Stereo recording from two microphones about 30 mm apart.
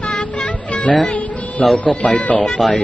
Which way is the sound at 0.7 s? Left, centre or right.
Left.